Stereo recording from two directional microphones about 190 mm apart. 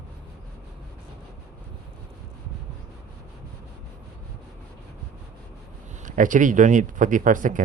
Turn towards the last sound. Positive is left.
turn(degrees=-45)  # may be behind; listen again after turning